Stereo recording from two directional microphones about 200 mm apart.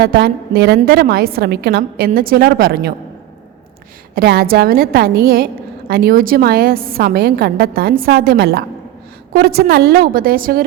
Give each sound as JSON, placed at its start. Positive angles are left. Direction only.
{"t": 0.0, "sound": "a woman's voice", "side_deg": -50}
{"t": 4.1, "sound": "a woman's voice", "side_deg": -50}